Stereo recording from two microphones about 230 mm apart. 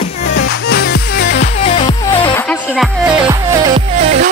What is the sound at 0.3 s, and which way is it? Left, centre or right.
Music, left.